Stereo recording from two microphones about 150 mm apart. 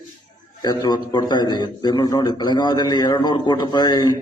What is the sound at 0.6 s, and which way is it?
A man's voice, 25° left (ahead or behind).